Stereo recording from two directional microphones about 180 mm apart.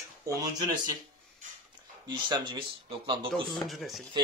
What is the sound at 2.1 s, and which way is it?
Speech, 25° right (ahead or behind).